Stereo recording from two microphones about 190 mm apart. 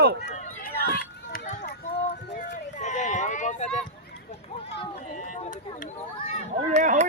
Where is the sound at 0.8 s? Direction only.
50° left (ahead or behind).